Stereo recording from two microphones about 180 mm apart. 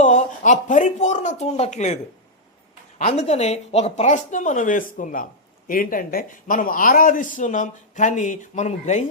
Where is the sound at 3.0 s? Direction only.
35° left (ahead or behind).